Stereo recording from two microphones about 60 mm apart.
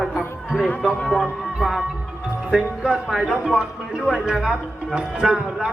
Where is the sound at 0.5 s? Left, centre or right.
Left.